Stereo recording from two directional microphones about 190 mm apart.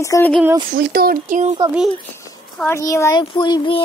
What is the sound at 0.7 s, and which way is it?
Speech, 50° right (ahead or behind).